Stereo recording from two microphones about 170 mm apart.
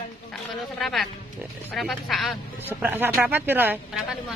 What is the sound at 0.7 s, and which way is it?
Speech, centre (ahead or behind).